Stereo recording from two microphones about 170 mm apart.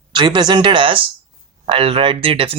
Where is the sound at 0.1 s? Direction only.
25° right (ahead or behind).